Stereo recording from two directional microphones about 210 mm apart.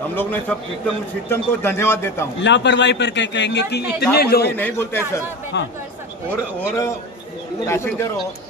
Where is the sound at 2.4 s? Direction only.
55° left (ahead or behind).